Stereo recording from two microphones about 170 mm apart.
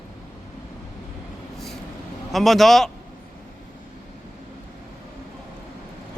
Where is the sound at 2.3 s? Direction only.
Centre (ahead or behind).